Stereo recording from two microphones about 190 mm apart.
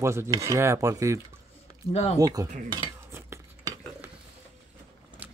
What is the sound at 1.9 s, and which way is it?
Speech, 35° left (ahead or behind).